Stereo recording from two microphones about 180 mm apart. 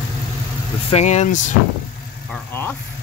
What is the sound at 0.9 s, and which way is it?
Speech, 35° left (ahead or behind).